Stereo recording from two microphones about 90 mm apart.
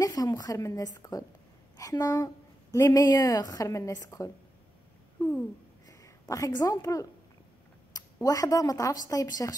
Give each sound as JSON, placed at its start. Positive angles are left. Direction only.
{"t": 0.0, "sound": "speech", "side_deg": 40}
{"t": 5.9, "sound": "a woman's voice", "side_deg": 35}